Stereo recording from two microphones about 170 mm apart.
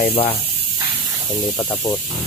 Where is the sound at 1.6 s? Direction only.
15° left (ahead or behind).